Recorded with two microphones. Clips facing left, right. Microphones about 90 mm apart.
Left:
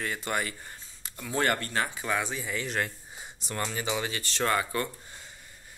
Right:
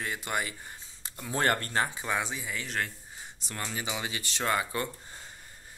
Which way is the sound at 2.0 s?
20° right (ahead or behind).